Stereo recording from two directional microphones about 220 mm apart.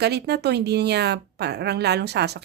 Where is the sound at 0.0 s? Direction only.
50° right (ahead or behind).